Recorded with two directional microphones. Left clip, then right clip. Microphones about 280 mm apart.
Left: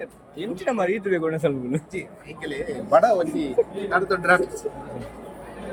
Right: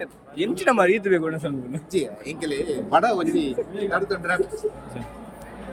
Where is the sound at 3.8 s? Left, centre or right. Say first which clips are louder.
Left 2 dB; centre.